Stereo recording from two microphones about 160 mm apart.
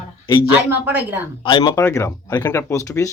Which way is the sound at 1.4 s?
30° left (ahead or behind).